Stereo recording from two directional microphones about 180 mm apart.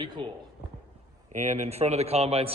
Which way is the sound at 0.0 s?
25° right (ahead or behind).